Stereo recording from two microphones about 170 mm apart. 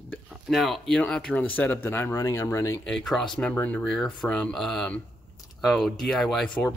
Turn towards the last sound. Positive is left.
turn(degrees=5)  # may be behind; listen again after turning